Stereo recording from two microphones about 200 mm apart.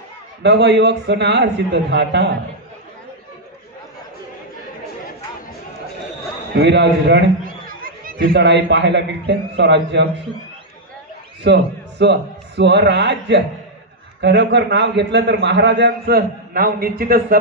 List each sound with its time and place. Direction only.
0.4 s a man's voice: 60° right (ahead or behind)
6.5 s a sound: 55° right (ahead or behind)
8.2 s a man's voice: 60° right (ahead or behind)
11.4 s a man's voice: 60° right (ahead or behind)